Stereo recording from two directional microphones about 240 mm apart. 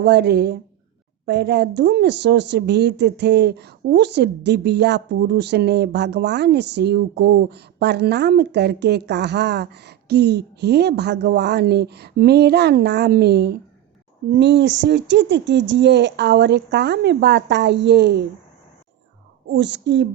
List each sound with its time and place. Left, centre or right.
0.0 s speech: right
19.5 s speech: right